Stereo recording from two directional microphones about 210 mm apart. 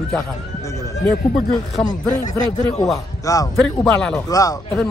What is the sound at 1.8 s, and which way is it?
Speech, 25° left (ahead or behind).